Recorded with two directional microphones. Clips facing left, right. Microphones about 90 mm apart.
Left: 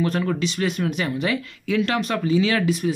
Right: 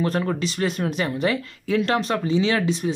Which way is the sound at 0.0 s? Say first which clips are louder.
Left 1 dB; 35° right (ahead or behind).